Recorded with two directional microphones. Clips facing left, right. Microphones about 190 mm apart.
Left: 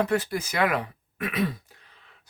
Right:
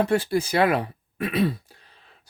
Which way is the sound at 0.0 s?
30° right (ahead or behind).